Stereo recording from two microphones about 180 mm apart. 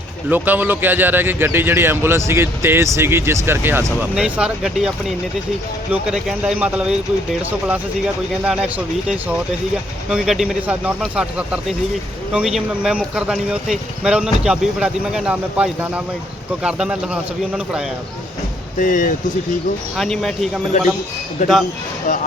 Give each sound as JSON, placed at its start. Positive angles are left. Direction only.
{"t": 0.3, "sound": "speech", "side_deg": -10}
{"t": 18.8, "sound": "speech", "side_deg": 45}
{"t": 20.0, "sound": "speech", "side_deg": 0}